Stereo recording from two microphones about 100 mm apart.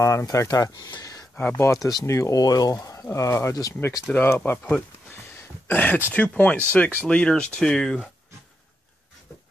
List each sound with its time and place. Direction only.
0.0 s speech: 30° left (ahead or behind)
1.3 s speech: 15° left (ahead or behind)
1.6 s speech: 35° left (ahead or behind)
4.1 s speech: 20° left (ahead or behind)